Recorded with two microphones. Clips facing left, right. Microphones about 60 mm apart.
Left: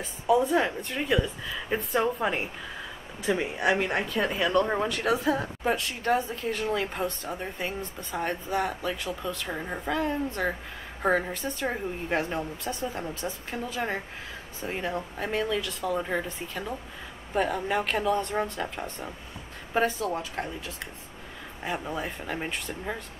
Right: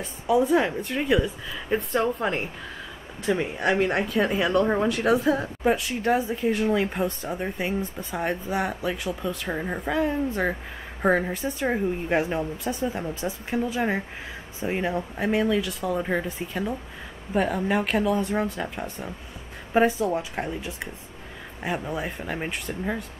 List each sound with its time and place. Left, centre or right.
0.0 s a woman's voice: centre
8.0 s a woman's voice: centre
19.7 s a woman's voice: centre
21.6 s speech: centre